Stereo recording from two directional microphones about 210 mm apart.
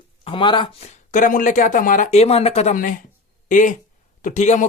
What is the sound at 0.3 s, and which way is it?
Speech, 20° left (ahead or behind).